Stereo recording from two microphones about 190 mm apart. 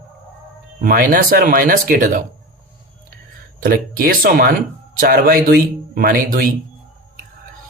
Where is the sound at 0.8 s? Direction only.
45° right (ahead or behind).